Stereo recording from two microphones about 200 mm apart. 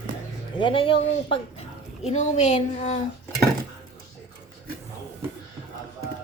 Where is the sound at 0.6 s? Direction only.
25° left (ahead or behind).